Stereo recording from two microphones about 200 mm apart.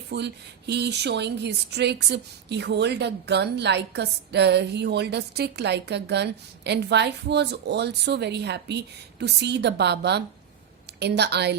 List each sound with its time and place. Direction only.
0.1 s speech: 55° right (ahead or behind)